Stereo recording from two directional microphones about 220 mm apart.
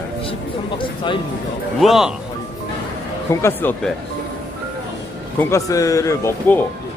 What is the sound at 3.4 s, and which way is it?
Speech, 10° left (ahead or behind).